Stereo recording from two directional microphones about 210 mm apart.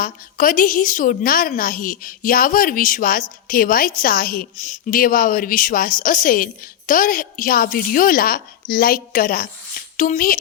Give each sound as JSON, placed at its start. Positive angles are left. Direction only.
{"t": 0.0, "sound": "a woman's voice", "side_deg": 40}